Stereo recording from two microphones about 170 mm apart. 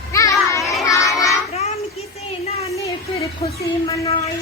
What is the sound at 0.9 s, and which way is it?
Child singing, 20° left (ahead or behind).